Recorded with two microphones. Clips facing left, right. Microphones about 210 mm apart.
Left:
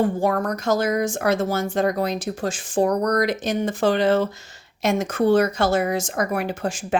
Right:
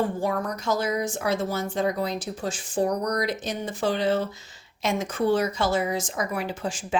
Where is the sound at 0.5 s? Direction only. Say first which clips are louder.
Left 5 dB; 85° left.